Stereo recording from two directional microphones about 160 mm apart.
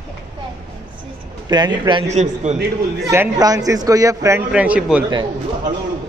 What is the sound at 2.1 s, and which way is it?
Speech, 45° right (ahead or behind).